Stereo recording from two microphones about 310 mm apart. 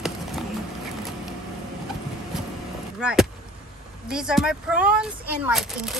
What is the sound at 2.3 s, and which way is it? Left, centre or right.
Vehicle, centre.